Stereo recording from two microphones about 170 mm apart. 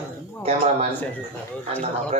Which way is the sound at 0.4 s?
40° right (ahead or behind).